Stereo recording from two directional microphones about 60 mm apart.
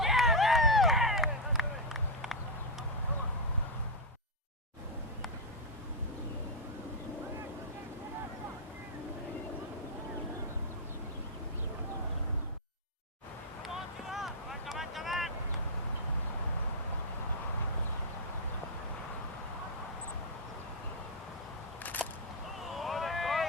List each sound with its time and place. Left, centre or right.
0.0 s a sound: centre
13.7 s vehicle: centre
21.8 s single-lens reflex camera: left
22.6 s vehicle: centre